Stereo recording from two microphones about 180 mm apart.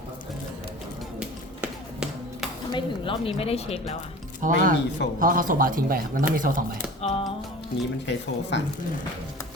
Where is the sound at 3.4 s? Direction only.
35° left (ahead or behind).